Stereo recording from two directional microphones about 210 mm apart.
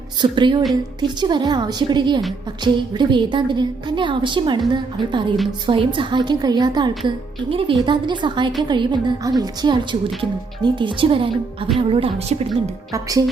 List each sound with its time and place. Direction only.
0.2 s a woman's voice: 20° right (ahead or behind)